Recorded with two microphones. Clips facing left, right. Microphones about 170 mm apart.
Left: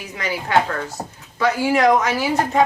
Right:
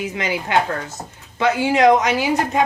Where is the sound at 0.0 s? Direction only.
20° right (ahead or behind).